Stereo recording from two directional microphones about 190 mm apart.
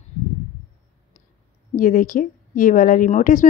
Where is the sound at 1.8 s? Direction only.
45° left (ahead or behind).